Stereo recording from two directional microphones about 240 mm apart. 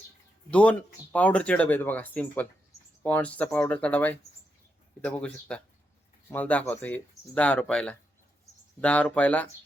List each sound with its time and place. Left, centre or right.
0.5 s speech: centre